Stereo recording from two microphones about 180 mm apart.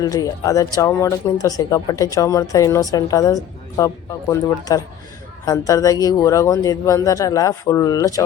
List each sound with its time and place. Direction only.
0.0 s speech: 20° left (ahead or behind)